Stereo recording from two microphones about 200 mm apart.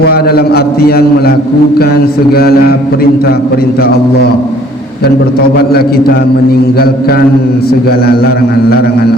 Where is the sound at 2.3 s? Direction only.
50° left (ahead or behind).